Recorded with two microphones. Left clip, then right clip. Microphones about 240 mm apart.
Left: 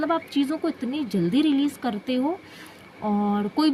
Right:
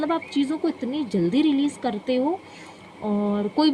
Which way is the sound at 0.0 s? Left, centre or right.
Left.